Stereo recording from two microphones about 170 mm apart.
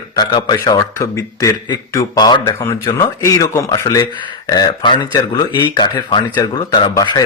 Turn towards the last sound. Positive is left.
turn(degrees=25)  # may be behind; listen again after turning